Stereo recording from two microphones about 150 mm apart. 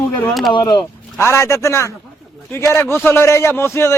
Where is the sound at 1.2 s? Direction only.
20° left (ahead or behind).